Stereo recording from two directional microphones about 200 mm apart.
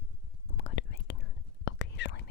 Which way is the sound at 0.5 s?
70° left (ahead or behind).